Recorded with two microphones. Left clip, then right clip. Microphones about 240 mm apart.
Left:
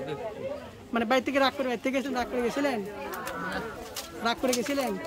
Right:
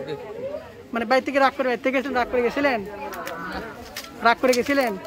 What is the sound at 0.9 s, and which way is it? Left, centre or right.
Speech, centre.